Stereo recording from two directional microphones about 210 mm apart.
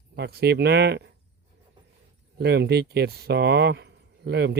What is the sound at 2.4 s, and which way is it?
Speech, 50° right (ahead or behind).